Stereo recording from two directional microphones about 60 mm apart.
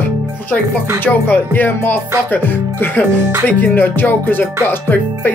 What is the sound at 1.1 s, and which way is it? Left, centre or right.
Music, left.